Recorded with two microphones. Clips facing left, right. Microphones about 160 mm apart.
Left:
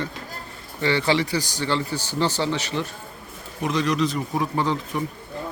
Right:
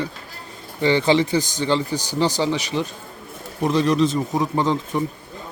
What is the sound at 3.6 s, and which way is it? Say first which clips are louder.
Speech: right 4 dB; 35° right (ahead or behind).